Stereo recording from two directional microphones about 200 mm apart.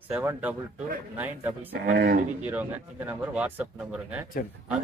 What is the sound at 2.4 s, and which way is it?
Speech, 10° right (ahead or behind).